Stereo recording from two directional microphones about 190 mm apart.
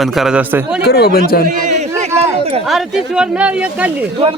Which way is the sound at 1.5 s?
40° right (ahead or behind).